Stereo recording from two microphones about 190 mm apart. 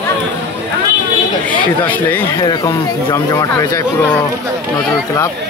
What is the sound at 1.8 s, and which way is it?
Speech, 10° left (ahead or behind).